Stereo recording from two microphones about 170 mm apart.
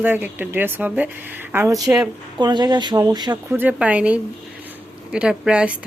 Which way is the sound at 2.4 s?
25° right (ahead or behind).